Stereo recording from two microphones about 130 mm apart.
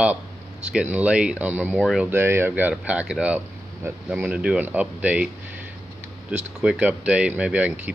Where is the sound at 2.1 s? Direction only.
20° right (ahead or behind).